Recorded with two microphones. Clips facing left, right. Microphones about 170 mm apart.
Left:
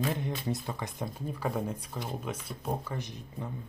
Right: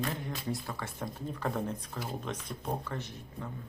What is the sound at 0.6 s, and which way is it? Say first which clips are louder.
Speech: left 2 dB; 15° left (ahead or behind).